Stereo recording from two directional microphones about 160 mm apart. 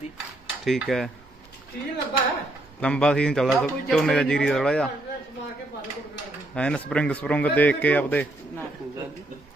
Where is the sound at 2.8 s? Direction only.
5° left (ahead or behind).